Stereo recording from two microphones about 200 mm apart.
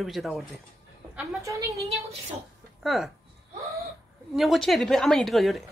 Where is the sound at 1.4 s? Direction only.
15° right (ahead or behind).